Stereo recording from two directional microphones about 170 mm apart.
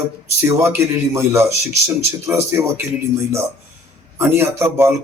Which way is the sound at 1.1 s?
15° right (ahead or behind).